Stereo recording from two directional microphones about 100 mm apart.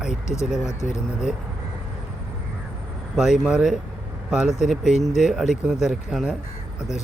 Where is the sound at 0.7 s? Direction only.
30° left (ahead or behind).